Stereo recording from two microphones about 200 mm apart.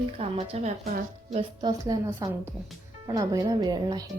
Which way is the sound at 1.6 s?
20° right (ahead or behind).